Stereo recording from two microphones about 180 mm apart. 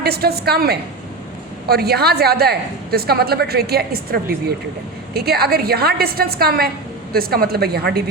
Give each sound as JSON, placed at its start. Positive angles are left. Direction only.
{"t": 0.0, "sound": "a woman's voice", "side_deg": -60}